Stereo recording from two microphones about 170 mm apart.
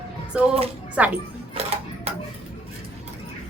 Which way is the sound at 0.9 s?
10° right (ahead or behind).